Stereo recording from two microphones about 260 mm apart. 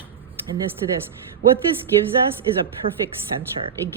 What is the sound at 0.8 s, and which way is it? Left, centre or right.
Speech, centre.